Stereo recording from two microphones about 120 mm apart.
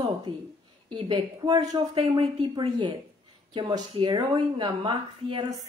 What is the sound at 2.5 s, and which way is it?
A woman's voice, 40° right (ahead or behind).